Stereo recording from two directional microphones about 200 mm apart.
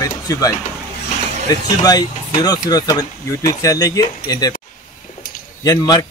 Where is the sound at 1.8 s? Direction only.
20° left (ahead or behind).